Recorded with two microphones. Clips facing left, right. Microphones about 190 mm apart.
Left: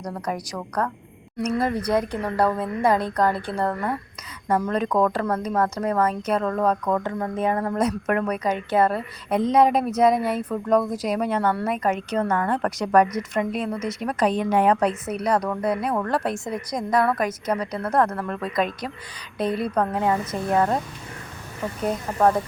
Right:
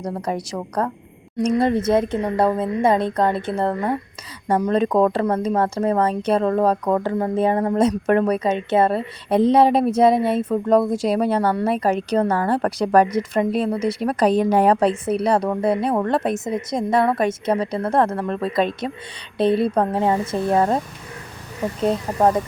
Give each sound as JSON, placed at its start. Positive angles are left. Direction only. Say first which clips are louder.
{"t": 0.0, "sound": "a woman's voice", "louder": "right 4 dB", "side_deg": -25}
{"t": 21.8, "sound": "a woman's voice", "louder": "right 2 dB", "side_deg": -20}